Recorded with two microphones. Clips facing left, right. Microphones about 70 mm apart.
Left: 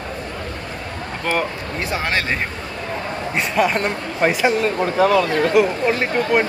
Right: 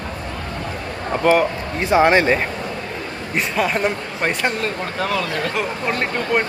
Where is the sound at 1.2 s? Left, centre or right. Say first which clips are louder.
Right 6 dB; centre.